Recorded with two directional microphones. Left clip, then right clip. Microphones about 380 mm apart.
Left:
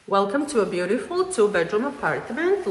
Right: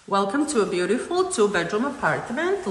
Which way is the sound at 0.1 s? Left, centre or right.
Centre.